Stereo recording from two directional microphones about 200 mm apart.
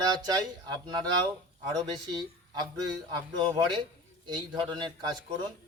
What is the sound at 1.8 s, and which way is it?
Speech, 20° right (ahead or behind).